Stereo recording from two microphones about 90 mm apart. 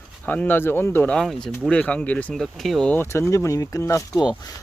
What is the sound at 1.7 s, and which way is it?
Speech, 15° left (ahead or behind).